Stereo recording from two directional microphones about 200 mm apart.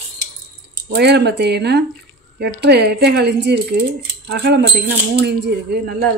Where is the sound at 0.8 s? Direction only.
55° right (ahead or behind).